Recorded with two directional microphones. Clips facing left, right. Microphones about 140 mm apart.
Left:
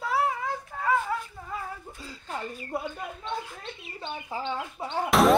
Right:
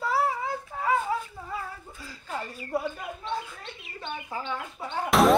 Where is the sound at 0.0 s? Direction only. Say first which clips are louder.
Right 1 dB; centre (ahead or behind).